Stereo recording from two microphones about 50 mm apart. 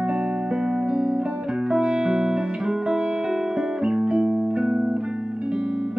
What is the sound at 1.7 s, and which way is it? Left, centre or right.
Music, centre.